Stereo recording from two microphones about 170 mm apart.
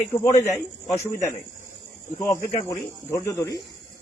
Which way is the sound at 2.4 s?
50° left (ahead or behind).